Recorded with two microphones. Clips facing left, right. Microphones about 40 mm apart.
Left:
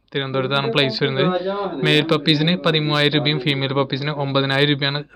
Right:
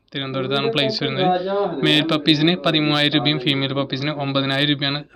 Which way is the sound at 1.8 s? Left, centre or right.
Centre.